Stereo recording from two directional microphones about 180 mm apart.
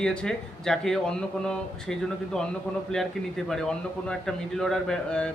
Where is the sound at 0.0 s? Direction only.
5° left (ahead or behind).